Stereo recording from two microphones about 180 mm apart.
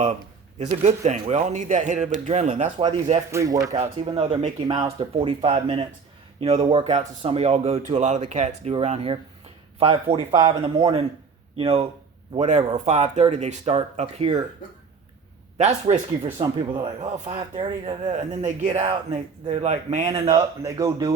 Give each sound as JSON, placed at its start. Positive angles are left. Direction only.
{"t": 0.6, "sound": "speech", "side_deg": -40}
{"t": 3.3, "sound": "speech", "side_deg": -20}
{"t": 4.0, "sound": "speech", "side_deg": -30}
{"t": 15.5, "sound": "speech", "side_deg": -35}
{"t": 16.4, "sound": "speech", "side_deg": -25}
{"t": 17.6, "sound": "speech", "side_deg": -40}
{"t": 20.1, "sound": "speech", "side_deg": -20}